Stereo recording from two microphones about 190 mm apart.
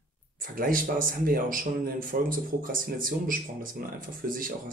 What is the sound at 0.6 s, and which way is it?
A man's voice, 45° right (ahead or behind).